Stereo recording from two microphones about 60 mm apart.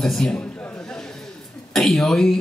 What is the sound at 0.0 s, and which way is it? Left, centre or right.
Speech, centre.